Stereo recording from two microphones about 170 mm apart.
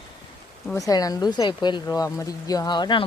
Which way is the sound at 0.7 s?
20° left (ahead or behind).